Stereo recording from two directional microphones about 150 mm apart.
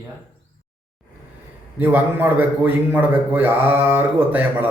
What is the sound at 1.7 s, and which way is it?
A man's voice, 15° right (ahead or behind).